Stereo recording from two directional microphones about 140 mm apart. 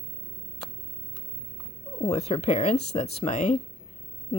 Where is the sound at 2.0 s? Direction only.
45° left (ahead or behind).